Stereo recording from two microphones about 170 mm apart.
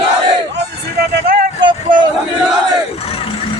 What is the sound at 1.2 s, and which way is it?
Vehicle, 60° right (ahead or behind).